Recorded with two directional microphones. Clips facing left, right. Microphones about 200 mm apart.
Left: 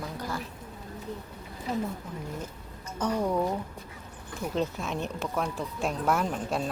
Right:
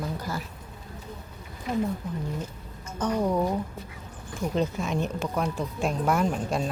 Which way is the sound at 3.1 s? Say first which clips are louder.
Right 3 dB; 10° right (ahead or behind).